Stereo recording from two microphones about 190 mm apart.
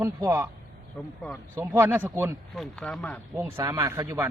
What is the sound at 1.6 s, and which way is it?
Speech, 15° right (ahead or behind).